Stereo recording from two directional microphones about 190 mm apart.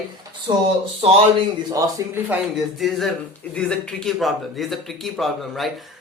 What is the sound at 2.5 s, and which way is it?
A man's voice, centre (ahead or behind).